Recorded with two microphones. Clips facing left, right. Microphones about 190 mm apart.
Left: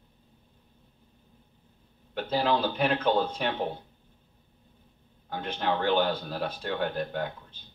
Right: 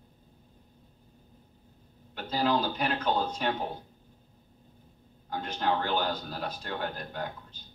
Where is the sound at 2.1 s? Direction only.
55° left (ahead or behind).